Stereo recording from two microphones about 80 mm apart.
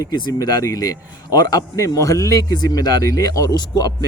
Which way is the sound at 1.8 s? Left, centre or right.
Left.